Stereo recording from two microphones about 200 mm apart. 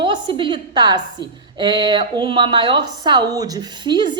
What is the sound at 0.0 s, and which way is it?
A woman's voice, 25° right (ahead or behind).